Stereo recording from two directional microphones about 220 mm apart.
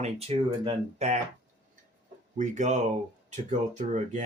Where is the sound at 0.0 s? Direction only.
25° right (ahead or behind).